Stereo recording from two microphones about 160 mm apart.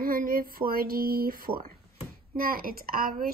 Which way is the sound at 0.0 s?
65° right (ahead or behind).